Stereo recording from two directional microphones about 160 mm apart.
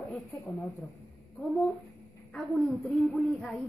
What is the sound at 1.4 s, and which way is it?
Speech, centre (ahead or behind).